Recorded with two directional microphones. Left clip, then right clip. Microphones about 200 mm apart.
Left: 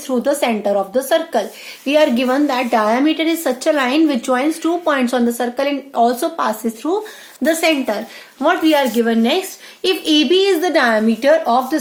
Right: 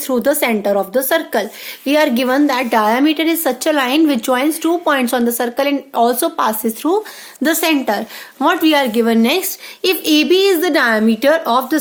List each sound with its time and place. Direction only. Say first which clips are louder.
0.1 s a woman's voice: right 2 dB; 45° right (ahead or behind)